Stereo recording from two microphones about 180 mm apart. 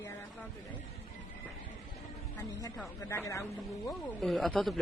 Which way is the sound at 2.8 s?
15° left (ahead or behind).